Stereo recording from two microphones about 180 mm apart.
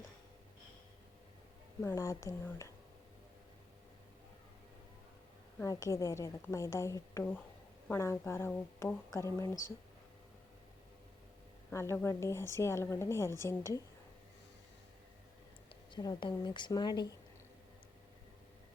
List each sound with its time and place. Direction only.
1.8 s a woman's voice: 15° left (ahead or behind)
5.6 s a woman's voice: 15° left (ahead or behind)
11.7 s a woman's voice: 15° left (ahead or behind)
15.9 s speech: 25° left (ahead or behind)